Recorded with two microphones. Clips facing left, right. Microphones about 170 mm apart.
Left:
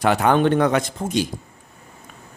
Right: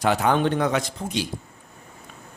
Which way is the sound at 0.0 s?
60° left (ahead or behind).